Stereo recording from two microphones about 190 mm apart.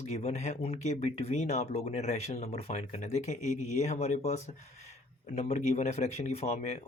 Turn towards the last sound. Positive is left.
turn(degrees=35)  # may be behind; listen again after turning